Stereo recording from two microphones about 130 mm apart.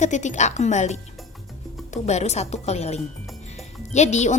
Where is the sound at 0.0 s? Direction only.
65° left (ahead or behind).